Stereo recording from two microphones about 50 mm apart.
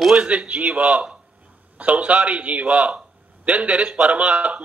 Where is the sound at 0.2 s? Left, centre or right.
Right.